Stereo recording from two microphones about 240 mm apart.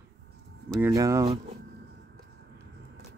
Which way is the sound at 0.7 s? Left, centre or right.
Centre.